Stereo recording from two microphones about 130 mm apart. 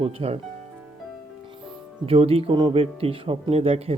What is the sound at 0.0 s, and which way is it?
Speech, 50° right (ahead or behind).